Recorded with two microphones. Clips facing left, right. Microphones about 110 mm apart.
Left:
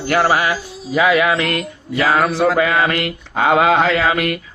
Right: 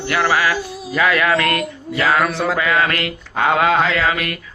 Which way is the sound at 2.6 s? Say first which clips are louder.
Left 2 dB; 30° left (ahead or behind).